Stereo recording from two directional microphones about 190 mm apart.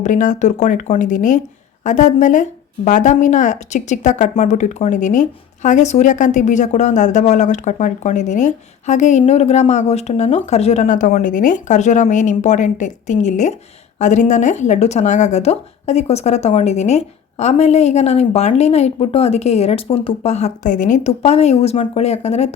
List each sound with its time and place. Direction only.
0.0 s speech: 40° left (ahead or behind)